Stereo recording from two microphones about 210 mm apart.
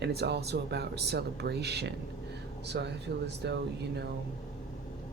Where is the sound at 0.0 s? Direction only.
50° right (ahead or behind).